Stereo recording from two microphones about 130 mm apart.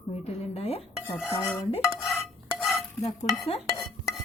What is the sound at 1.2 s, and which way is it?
Dishes, 15° left (ahead or behind).